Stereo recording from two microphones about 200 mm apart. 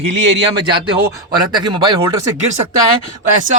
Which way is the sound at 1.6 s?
20° right (ahead or behind).